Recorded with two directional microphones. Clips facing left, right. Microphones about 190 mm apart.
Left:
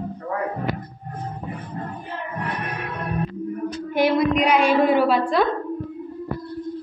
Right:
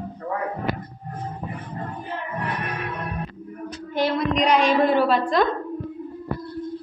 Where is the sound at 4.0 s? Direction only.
10° left (ahead or behind).